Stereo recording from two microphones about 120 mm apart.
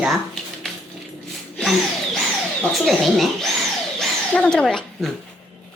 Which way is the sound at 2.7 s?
Centre (ahead or behind).